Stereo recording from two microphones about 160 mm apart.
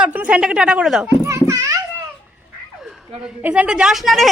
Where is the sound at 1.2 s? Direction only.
20° right (ahead or behind).